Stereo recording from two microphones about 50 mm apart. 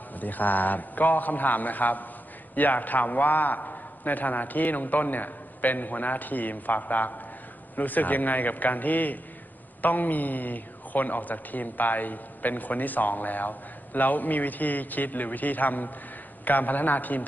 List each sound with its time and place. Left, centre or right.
0.1 s speech: left